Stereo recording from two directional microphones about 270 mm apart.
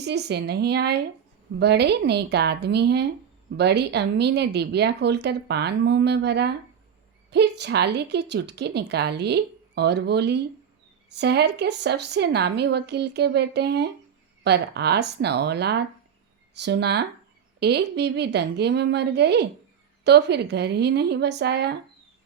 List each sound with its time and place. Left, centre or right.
0.0 s a woman's voice: right